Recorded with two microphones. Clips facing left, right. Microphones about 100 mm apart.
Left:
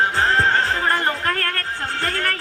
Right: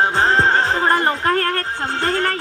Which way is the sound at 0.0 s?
25° right (ahead or behind).